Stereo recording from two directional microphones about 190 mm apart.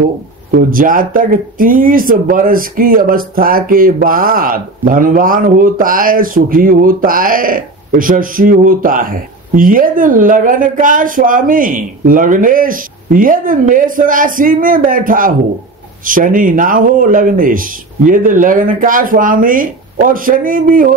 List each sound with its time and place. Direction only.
0.5 s speech: 45° right (ahead or behind)